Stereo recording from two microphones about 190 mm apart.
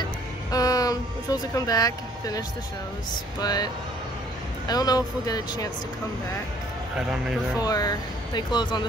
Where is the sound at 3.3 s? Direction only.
20° left (ahead or behind).